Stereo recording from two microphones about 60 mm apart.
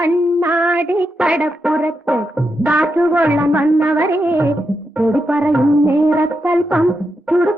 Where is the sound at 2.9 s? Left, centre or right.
Right.